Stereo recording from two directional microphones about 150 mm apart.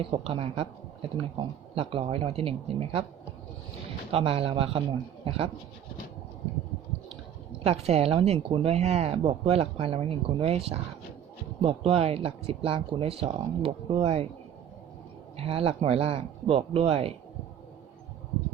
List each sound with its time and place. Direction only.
0.0 s speech: 40° right (ahead or behind)
4.1 s speech: 40° right (ahead or behind)
7.6 s speech: 45° right (ahead or behind)
15.4 s speech: 40° right (ahead or behind)